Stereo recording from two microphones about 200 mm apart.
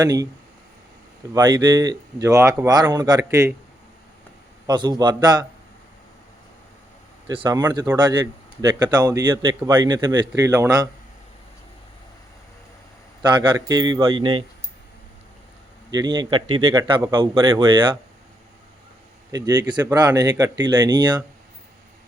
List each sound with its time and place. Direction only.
0.0 s speech: 20° right (ahead or behind)
1.3 s speech: 20° right (ahead or behind)
4.6 s speech: 20° right (ahead or behind)
7.3 s speech: 20° right (ahead or behind)
13.2 s speech: 20° right (ahead or behind)
15.9 s speech: 20° right (ahead or behind)
19.3 s speech: 20° right (ahead or behind)